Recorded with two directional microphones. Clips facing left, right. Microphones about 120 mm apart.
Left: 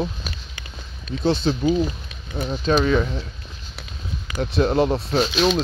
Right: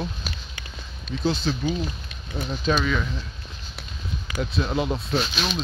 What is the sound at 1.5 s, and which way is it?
Speech, 30° left (ahead or behind).